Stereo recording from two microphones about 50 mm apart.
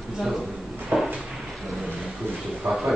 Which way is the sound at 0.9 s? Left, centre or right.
Right.